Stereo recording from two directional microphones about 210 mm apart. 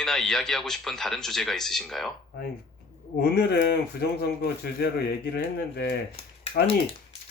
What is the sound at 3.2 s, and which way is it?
Speech, 50° left (ahead or behind).